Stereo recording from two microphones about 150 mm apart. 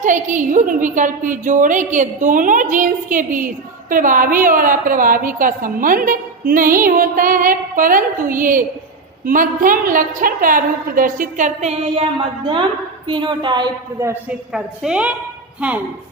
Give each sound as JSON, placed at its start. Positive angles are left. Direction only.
{"t": 0.0, "sound": "a woman's voice", "side_deg": -60}
{"t": 14.1, "sound": "a woman's voice", "side_deg": -5}